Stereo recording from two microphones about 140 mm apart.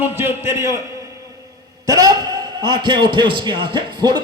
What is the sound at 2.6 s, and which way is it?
Speech, 35° right (ahead or behind).